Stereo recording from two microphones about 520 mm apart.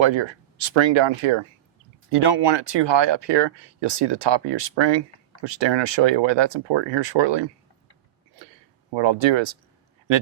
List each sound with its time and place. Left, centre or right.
0.0 s speech: right
2.1 s speech: right
8.9 s speech: right